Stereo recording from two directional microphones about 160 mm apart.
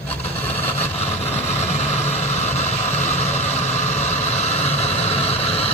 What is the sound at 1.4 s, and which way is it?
Vehicle, 40° left (ahead or behind).